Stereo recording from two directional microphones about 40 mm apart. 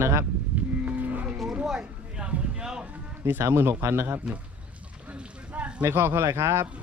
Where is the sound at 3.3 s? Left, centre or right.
Right.